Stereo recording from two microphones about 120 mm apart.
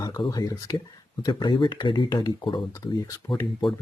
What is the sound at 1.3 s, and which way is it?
Speech, 40° left (ahead or behind).